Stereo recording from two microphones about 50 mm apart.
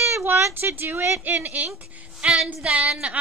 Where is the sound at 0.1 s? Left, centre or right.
Right.